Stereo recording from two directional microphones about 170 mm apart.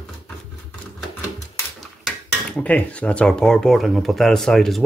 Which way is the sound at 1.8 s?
5° left (ahead or behind).